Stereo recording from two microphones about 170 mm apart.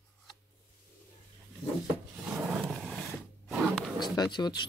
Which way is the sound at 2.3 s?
10° right (ahead or behind).